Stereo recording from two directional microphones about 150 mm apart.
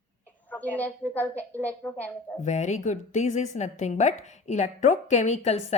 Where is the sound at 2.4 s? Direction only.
50° left (ahead or behind).